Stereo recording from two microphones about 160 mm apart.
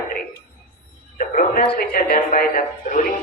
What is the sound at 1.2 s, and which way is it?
Speech, 60° left (ahead or behind).